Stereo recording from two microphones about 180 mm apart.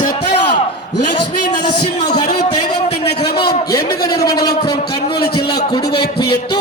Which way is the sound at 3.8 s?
60° left (ahead or behind).